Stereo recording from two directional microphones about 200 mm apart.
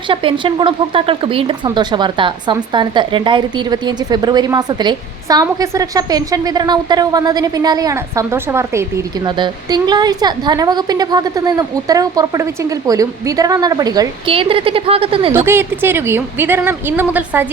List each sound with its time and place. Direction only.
0.1 s speech: 25° right (ahead or behind)
15.3 s speech: 10° right (ahead or behind)